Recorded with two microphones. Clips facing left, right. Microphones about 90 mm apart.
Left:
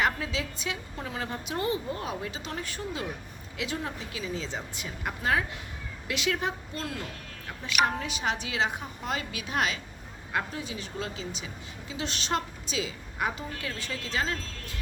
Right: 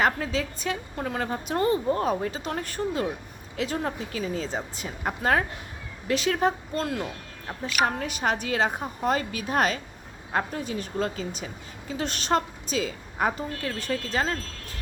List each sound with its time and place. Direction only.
0.0 s a woman's voice: 40° right (ahead or behind)